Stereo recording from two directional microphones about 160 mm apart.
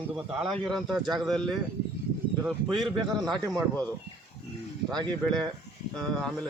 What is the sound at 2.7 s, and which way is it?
Speech, centre (ahead or behind).